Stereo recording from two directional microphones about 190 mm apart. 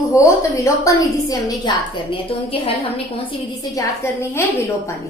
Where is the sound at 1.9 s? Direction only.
25° left (ahead or behind).